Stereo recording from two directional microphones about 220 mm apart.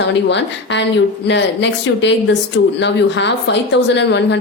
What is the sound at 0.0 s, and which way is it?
A woman's voice, 50° left (ahead or behind).